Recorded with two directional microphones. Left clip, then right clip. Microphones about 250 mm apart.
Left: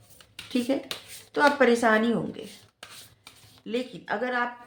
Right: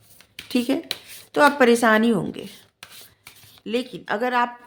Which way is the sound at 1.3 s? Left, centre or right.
Right.